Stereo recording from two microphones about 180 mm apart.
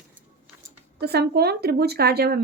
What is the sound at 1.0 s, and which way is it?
A woman's voice, 60° right (ahead or behind).